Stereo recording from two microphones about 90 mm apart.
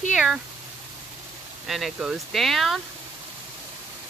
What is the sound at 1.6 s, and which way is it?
Speech, centre (ahead or behind).